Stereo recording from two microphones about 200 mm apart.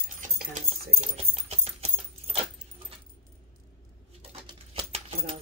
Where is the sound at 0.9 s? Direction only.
30° right (ahead or behind).